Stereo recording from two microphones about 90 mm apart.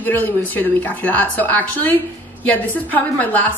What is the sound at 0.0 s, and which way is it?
A woman's voice, 20° left (ahead or behind).